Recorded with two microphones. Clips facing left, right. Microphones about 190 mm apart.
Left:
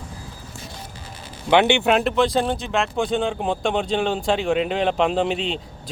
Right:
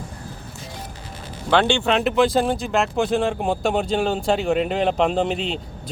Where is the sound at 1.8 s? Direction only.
5° left (ahead or behind).